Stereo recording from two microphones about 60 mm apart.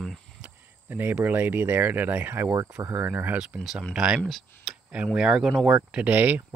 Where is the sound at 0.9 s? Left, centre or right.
Right.